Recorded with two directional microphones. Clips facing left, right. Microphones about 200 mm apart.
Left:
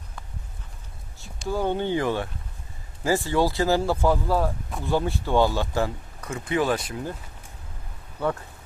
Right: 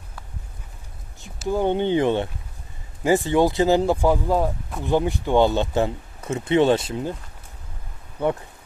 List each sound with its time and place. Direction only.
1.5 s speech: 20° right (ahead or behind)
8.2 s speech: 20° right (ahead or behind)